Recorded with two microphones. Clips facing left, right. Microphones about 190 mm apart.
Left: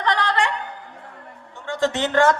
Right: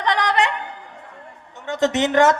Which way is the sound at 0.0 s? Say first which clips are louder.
Right 2 dB; 15° right (ahead or behind).